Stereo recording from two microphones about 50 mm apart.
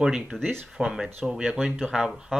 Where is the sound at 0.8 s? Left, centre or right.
Centre.